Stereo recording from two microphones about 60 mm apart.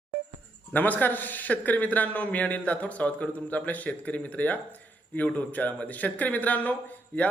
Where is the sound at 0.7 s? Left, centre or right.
Left.